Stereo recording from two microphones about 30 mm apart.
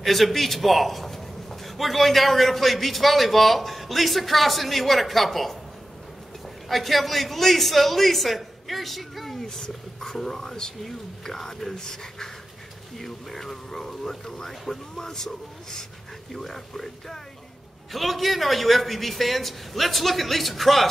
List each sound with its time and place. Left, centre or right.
0.0 s a man's voice: centre
6.7 s a man's voice: centre
9.6 s a man's voice: centre